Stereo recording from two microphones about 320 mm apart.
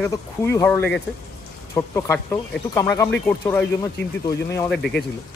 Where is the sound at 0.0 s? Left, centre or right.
Centre.